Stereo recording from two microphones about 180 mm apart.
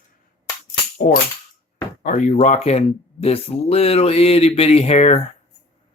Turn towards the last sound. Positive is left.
turn(degrees=35)  # may be behind; listen again after turning